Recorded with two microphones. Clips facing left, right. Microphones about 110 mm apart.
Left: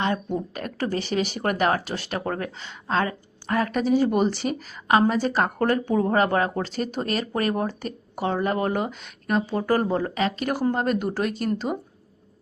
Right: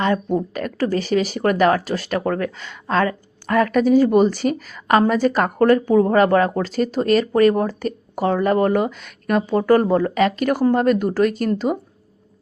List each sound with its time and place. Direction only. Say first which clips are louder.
0.0 s speech: right 6 dB; 45° right (ahead or behind)
4.9 s a woman's voice: right 3 dB; 60° right (ahead or behind)
5.3 s speech: right 5 dB; 50° right (ahead or behind)
5.6 s speech: right 11 dB; 25° left (ahead or behind)
5.9 s speech: right 6 dB; 45° right (ahead or behind)